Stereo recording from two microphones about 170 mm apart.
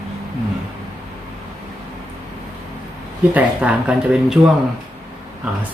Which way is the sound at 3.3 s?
10° right (ahead or behind).